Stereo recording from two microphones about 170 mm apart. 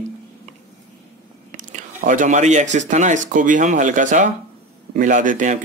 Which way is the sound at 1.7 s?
50° right (ahead or behind).